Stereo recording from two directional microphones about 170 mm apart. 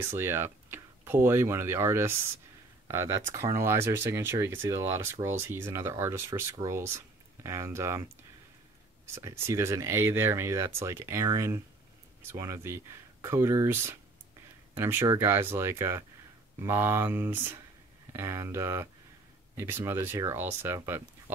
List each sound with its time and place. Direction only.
0.0 s speech: 15° right (ahead or behind)